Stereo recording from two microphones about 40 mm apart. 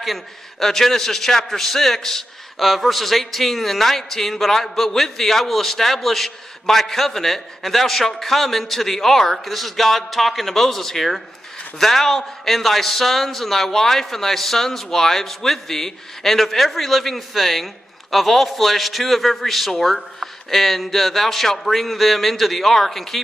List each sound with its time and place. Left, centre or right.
0.0 s a man's voice: centre
2.6 s a man's voice: centre